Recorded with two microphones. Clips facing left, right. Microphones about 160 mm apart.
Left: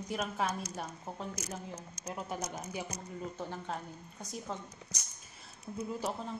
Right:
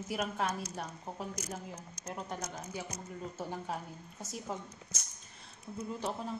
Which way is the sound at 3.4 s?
5° right (ahead or behind).